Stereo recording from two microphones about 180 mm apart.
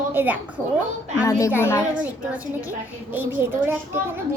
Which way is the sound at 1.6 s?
15° left (ahead or behind).